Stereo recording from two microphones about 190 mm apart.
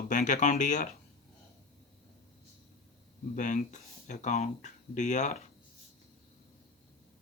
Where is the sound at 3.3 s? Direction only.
40° left (ahead or behind).